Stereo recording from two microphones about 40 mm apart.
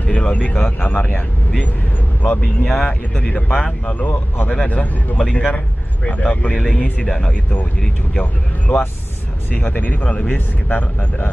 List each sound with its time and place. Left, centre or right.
0.0 s speech: left
2.2 s speech: left
2.6 s speech: centre
2.9 s speech: left
8.2 s speech: left
10.0 s speech: left
10.3 s speech: left